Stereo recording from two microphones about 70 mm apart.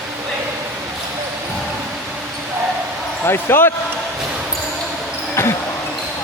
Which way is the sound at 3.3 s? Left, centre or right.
Left.